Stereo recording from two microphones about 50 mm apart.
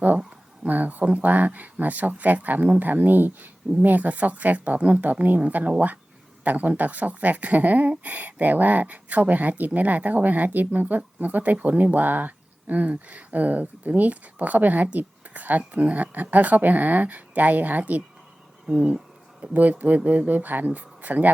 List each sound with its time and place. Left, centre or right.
0.6 s speech: right
19.4 s speech: right